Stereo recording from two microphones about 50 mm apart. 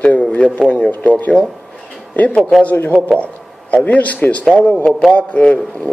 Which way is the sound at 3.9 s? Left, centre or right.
Left.